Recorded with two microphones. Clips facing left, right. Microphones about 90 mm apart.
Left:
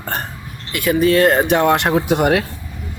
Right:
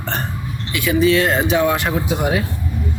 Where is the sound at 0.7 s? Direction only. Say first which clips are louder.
Left 1 dB; 50° left (ahead or behind).